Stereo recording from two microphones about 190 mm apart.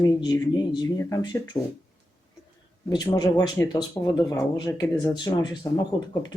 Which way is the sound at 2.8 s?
20° left (ahead or behind).